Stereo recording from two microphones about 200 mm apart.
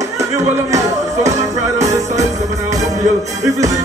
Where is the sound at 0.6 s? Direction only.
15° right (ahead or behind).